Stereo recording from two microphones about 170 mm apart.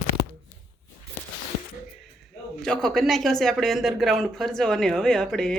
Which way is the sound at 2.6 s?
5° left (ahead or behind).